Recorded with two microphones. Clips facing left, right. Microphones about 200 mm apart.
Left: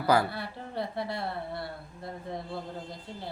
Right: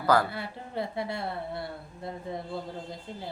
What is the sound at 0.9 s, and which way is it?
Speech, 20° right (ahead or behind).